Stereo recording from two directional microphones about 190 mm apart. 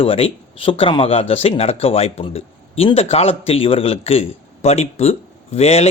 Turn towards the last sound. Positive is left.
turn(degrees=35)  # may be behind; listen again after turning